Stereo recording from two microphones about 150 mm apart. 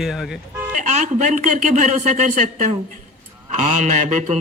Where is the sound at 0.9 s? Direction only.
50° right (ahead or behind).